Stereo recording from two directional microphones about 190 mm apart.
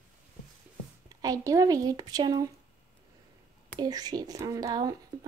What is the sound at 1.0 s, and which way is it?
Speech, 20° right (ahead or behind).